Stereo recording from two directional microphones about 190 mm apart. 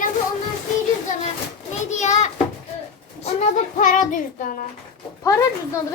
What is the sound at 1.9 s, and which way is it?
Speech, 40° left (ahead or behind).